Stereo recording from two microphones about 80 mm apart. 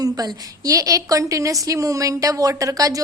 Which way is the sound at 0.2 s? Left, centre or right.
Right.